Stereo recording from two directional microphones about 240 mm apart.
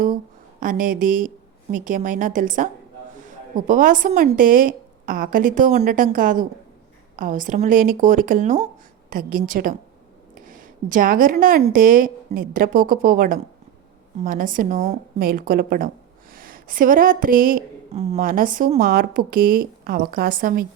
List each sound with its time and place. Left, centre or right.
0.6 s a woman's voice: right